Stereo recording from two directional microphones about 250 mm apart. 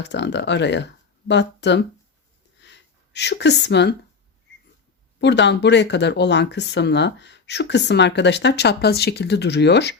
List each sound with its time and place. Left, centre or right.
0.0 s speech: left
2.6 s a sound: left
5.2 s speech: left